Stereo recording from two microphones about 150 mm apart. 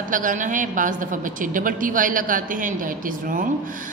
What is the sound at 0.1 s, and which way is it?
A woman's voice, 60° right (ahead or behind).